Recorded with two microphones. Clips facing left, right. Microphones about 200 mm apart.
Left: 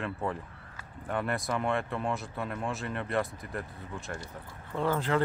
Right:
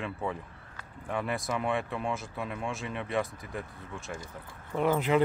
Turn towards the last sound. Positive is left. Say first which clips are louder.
# right 3 dB
turn(degrees=-15)  # may be behind; listen again after turning